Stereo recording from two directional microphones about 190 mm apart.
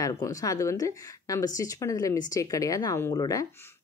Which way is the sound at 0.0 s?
15° left (ahead or behind).